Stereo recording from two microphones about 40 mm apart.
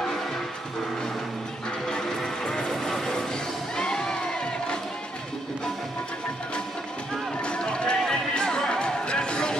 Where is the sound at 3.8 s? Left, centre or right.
Centre.